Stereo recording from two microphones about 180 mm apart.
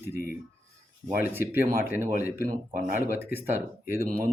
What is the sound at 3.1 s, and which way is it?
Speech, 10° right (ahead or behind).